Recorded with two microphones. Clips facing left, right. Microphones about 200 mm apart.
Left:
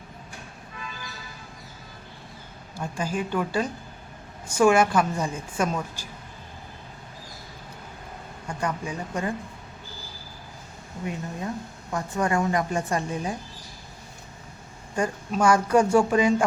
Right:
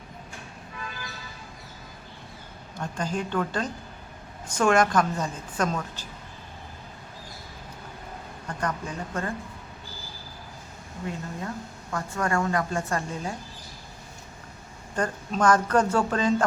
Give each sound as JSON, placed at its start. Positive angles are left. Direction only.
{"t": 2.7, "sound": "a woman's voice", "side_deg": 10}
{"t": 8.4, "sound": "a woman's voice", "side_deg": 10}
{"t": 11.0, "sound": "a woman's voice", "side_deg": 20}
{"t": 14.9, "sound": "a woman's voice", "side_deg": 10}